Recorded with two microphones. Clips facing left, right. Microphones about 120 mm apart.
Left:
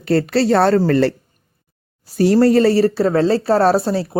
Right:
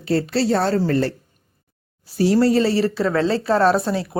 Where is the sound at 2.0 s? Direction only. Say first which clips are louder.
Left 4 dB; 50° left (ahead or behind); by 4.1 s 35° left (ahead or behind).